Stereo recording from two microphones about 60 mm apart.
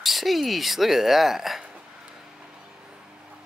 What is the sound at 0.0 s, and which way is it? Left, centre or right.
Speech, centre.